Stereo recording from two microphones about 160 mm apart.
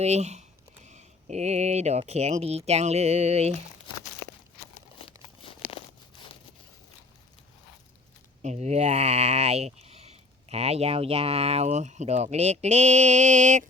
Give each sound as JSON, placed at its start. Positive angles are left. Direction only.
{"t": 0.0, "sound": "speech", "side_deg": -45}
{"t": 4.9, "sound": "crumpling", "side_deg": 35}
{"t": 8.4, "sound": "speech", "side_deg": -45}